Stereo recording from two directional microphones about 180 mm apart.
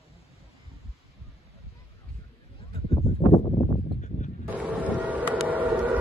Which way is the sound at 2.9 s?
35° left (ahead or behind).